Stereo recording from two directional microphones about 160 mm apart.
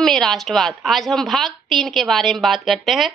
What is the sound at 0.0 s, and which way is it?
A woman's voice, 5° left (ahead or behind).